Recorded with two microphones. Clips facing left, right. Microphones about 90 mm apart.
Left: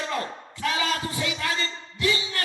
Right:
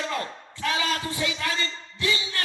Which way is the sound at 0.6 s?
30° left (ahead or behind).